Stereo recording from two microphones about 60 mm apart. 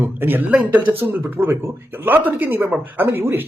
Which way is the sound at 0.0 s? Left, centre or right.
Right.